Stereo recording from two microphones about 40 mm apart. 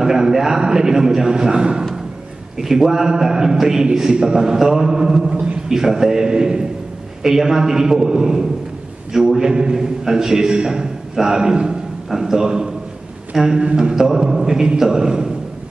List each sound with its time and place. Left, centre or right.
0.0 s a man's voice: centre